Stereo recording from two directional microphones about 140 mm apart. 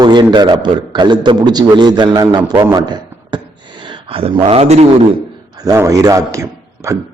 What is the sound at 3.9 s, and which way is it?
Speech, 40° right (ahead or behind).